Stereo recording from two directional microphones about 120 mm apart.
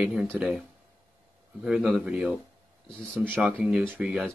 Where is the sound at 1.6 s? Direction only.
5° right (ahead or behind).